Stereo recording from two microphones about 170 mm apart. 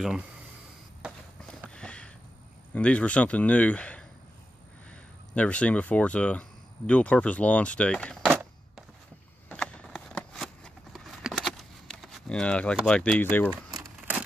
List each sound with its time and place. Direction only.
1.0 s run: 5° right (ahead or behind)
1.7 s sniff: 5° left (ahead or behind)
2.7 s speech: 5° left (ahead or behind)
5.3 s speech: 5° left (ahead or behind)
9.5 s shuffling cards: 5° left (ahead or behind)
12.8 s speech: 5° left (ahead or behind)
13.5 s crumpling: 20° right (ahead or behind)